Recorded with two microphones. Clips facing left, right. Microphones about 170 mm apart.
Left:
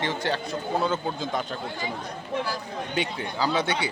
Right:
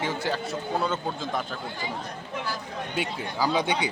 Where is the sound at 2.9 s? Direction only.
5° right (ahead or behind).